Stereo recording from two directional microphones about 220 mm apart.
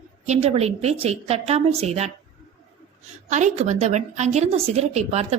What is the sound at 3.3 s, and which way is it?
A woman's voice, 35° right (ahead or behind).